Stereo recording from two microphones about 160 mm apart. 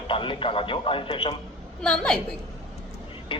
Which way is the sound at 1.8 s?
5° left (ahead or behind).